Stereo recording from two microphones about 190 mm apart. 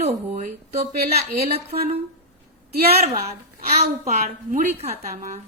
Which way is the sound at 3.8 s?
40° right (ahead or behind).